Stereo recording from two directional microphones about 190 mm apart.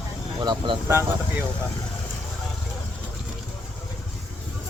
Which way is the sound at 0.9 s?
15° right (ahead or behind).